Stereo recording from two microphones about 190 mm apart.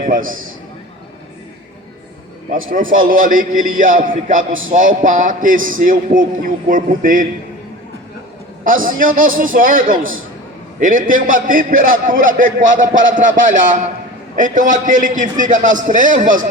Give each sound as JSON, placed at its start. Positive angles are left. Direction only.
{"t": 0.0, "sound": "a man's voice", "side_deg": -45}
{"t": 2.7, "sound": "a man's voice", "side_deg": -45}
{"t": 8.6, "sound": "a man's voice", "side_deg": -45}